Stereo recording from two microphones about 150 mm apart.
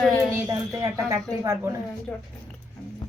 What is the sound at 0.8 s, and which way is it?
Speech, 20° right (ahead or behind).